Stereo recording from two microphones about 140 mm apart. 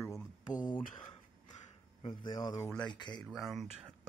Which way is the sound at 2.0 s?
35° left (ahead or behind).